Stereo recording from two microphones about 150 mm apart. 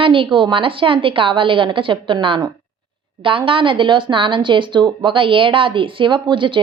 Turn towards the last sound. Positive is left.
turn(degrees=-35)  # may be behind; listen again after turning